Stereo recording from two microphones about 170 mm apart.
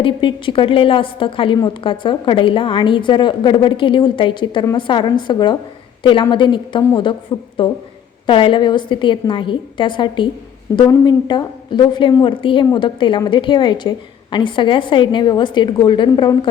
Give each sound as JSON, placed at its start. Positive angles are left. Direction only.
{"t": 0.0, "sound": "a woman's voice", "side_deg": 30}